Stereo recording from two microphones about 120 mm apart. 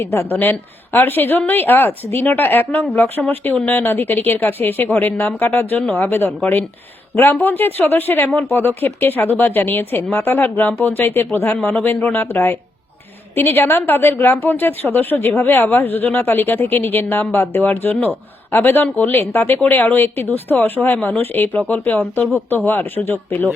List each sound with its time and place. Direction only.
0.0 s speech: 20° left (ahead or behind)